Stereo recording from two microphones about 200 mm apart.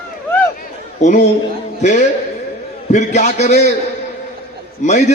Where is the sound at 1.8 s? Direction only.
35° left (ahead or behind).